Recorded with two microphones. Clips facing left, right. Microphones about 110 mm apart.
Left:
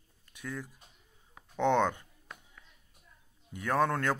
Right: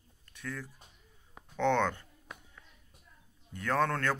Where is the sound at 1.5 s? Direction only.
15° left (ahead or behind).